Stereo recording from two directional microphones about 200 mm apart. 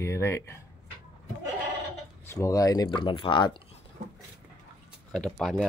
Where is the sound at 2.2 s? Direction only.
15° left (ahead or behind).